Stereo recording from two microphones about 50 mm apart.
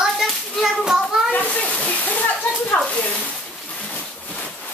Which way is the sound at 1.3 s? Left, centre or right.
Left.